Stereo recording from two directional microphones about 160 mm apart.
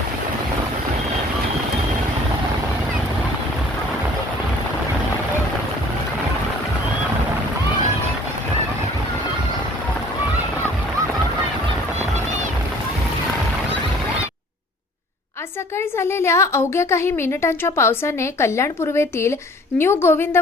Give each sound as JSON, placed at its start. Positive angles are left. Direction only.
{"t": 15.8, "sound": "a woman's voice", "side_deg": 15}